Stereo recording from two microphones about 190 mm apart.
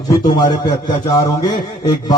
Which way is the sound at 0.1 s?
20° left (ahead or behind).